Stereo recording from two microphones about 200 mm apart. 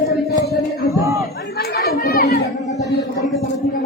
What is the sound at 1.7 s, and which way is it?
Chatter, 50° left (ahead or behind).